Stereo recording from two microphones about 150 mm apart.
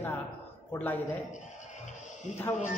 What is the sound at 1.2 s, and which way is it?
Music, 55° left (ahead or behind).